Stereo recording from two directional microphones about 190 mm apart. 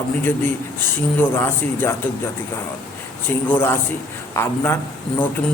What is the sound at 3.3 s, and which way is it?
A man's voice, 10° left (ahead or behind).